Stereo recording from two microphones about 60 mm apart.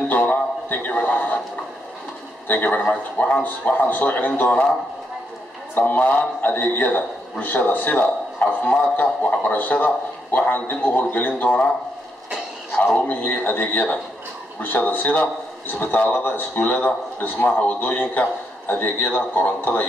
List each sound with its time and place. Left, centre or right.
0.1 s a sound: left
2.4 s a man's voice: left
5.8 s a man's voice: left
12.7 s a man's voice: centre
13.0 s a man's voice: left